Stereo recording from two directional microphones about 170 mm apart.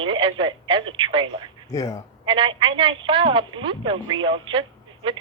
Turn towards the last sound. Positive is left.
turn(degrees=-30)  # may be behind; listen again after turning